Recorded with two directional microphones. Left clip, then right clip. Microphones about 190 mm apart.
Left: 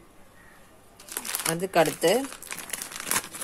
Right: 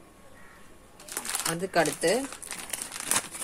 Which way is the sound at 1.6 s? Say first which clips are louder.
Left 4 dB; 40° left (ahead or behind).